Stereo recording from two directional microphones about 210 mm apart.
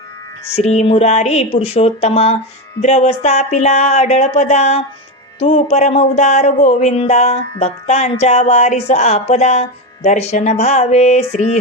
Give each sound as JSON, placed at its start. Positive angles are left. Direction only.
{"t": 0.5, "sound": "speech", "side_deg": 30}